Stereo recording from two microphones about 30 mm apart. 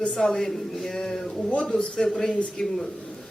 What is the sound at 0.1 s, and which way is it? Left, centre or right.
Speech, centre.